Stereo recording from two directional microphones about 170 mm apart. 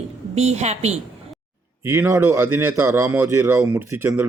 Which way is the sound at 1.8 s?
15° right (ahead or behind).